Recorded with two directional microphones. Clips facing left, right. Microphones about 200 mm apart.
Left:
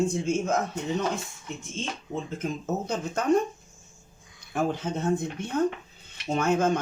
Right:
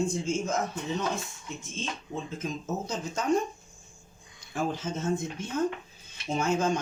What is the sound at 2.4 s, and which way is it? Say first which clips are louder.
Speech: left 3 dB; 60° left (ahead or behind).